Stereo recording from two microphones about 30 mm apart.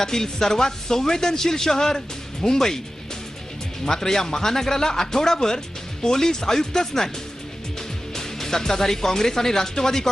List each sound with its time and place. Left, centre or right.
0.0 s speech: centre
3.8 s speech: centre